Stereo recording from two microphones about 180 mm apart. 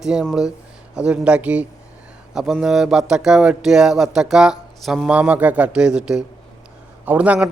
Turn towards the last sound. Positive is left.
turn(degrees=-5)  # may be behind; listen again after turning